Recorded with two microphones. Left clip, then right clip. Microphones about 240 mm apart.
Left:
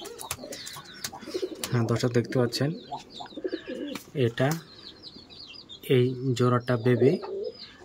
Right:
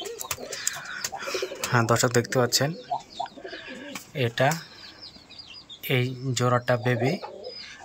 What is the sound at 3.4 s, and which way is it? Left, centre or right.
Bird, centre.